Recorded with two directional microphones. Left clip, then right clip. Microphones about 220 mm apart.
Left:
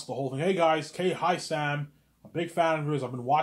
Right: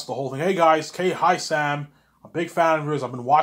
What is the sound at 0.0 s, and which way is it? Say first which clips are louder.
Speech: right 5 dB; 15° right (ahead or behind).